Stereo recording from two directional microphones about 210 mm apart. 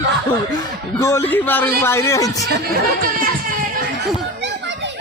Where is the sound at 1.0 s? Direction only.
10° left (ahead or behind).